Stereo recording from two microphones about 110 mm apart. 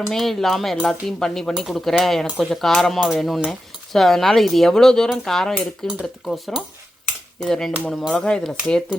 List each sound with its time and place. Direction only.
0.1 s speech: 5° left (ahead or behind)